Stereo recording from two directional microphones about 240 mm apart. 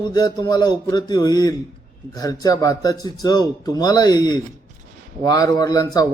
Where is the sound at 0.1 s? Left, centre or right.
Centre.